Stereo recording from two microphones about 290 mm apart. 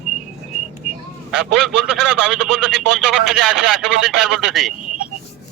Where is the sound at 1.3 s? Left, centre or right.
Centre.